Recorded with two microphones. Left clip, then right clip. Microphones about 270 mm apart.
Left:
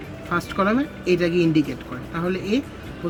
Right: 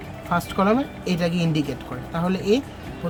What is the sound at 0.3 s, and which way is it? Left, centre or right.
Speech, right.